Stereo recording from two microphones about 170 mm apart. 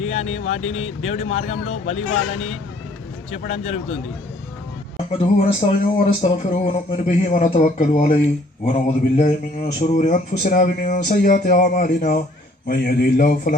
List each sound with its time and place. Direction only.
0.0 s speech: 40° left (ahead or behind)
3.3 s speech: 40° left (ahead or behind)
5.1 s a man's voice: 40° left (ahead or behind); by 13.6 s 55° left (ahead or behind)